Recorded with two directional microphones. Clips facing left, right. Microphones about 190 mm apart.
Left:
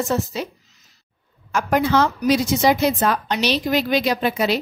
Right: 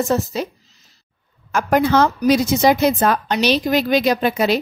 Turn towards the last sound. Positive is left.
turn(degrees=-50)  # may be behind; listen again after turning